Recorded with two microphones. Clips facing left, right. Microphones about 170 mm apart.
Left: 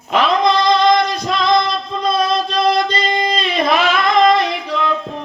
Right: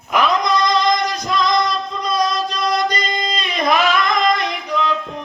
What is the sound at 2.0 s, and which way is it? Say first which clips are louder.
Child singing: left 3 dB; 25° left (ahead or behind).